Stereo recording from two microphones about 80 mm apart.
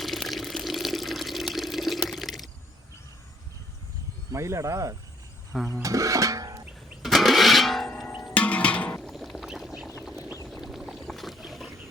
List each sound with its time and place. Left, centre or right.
0.0 s water: centre
4.3 s speech: right
5.5 s speech: centre
5.8 s music: right
7.0 s guitar: centre
8.3 s music: centre
9.0 s a sound: centre
9.5 s duck: centre
10.5 s boat: centre